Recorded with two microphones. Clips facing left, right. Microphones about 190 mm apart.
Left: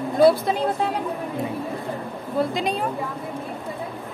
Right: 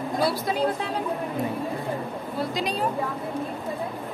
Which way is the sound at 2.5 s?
55° left (ahead or behind).